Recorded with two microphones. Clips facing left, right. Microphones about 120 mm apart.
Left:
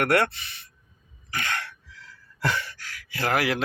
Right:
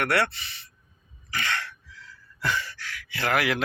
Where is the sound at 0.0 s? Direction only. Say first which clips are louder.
Left 3 dB; 45° left (ahead or behind).